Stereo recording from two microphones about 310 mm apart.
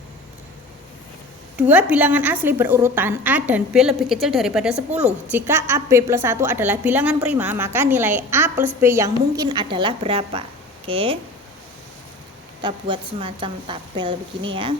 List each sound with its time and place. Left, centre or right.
1.5 s a woman's voice: centre
4.9 s a woman's voice: right
5.3 s a woman's voice: centre
12.6 s a woman's voice: centre